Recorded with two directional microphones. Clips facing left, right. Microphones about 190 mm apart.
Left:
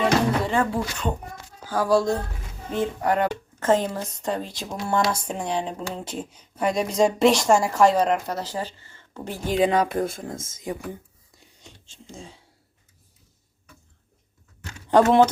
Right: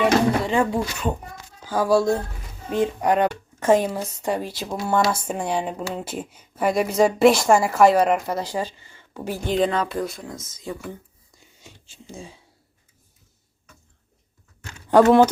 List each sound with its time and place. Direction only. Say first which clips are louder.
0.0 s music: right 2 dB; 15° right (ahead or behind)
1.7 s speech: right 2 dB; 15° right (ahead or behind)
9.5 s speech: left 1 dB; 10° left (ahead or behind)
9.9 s speech: left 2 dB; 50° left (ahead or behind)
11.3 s a sound: right 1 dB; 5° right (ahead or behind)
14.8 s speech: right 2 dB; 10° right (ahead or behind)